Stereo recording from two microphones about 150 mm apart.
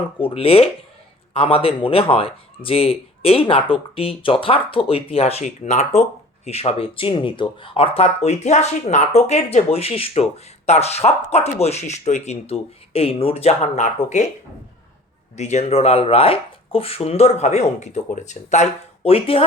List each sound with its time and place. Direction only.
0.2 s speech: 40° left (ahead or behind); by 14.3 s 55° left (ahead or behind)
15.4 s speech: 50° left (ahead or behind)